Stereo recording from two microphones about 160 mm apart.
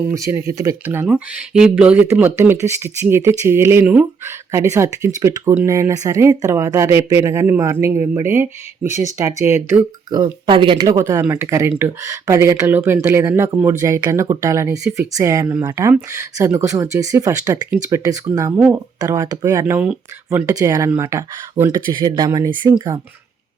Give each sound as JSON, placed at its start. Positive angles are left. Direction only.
{"t": 0.1, "sound": "speech", "side_deg": -20}
{"t": 18.5, "sound": "speech", "side_deg": -10}
{"t": 18.9, "sound": "speech", "side_deg": -20}